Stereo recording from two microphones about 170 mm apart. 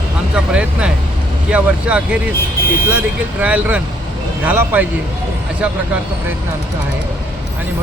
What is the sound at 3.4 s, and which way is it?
Speech, 10° right (ahead or behind).